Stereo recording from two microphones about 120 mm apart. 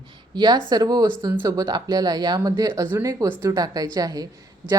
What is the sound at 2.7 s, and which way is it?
Speech, 20° right (ahead or behind).